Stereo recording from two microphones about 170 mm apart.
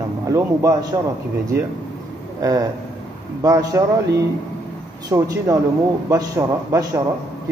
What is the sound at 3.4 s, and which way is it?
Speech, 20° right (ahead or behind).